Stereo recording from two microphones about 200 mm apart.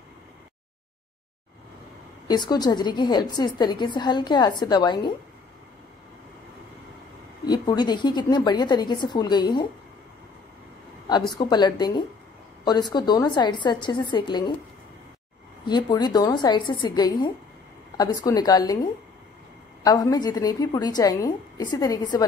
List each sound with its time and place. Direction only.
2.2 s a woman's voice: 20° left (ahead or behind)
7.4 s a woman's voice: 20° left (ahead or behind)
11.1 s a woman's voice: 20° left (ahead or behind)
15.6 s a woman's voice: 20° left (ahead or behind)
19.8 s a woman's voice: 20° left (ahead or behind)